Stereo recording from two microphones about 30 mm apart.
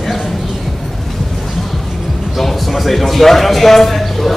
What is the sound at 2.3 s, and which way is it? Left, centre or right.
A man's voice, centre.